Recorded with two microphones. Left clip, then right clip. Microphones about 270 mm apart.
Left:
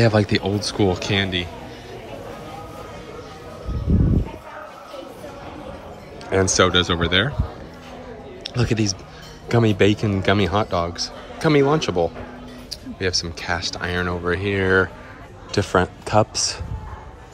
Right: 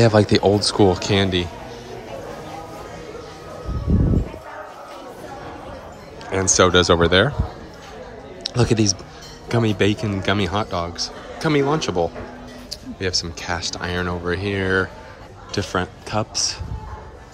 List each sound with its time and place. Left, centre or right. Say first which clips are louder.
0.0 s speech: right 4 dB; centre
6.5 s speech: right 6 dB; centre
8.5 s a man's voice: right 4 dB; centre